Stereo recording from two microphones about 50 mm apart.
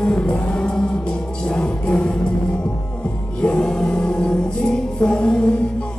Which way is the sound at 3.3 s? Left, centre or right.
Centre.